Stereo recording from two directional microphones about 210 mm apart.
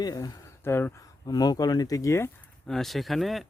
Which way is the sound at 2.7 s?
Centre (ahead or behind).